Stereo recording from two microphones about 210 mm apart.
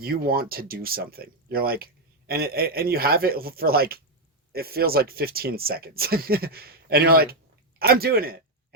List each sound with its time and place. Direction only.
0.0 s speech: 45° right (ahead or behind)